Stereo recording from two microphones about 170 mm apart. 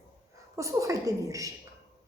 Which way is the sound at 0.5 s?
20° right (ahead or behind).